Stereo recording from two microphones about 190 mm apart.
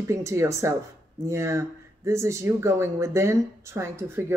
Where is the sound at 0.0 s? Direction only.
15° right (ahead or behind).